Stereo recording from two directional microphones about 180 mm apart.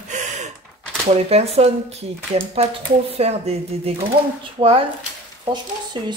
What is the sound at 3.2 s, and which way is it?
Speech, 35° right (ahead or behind).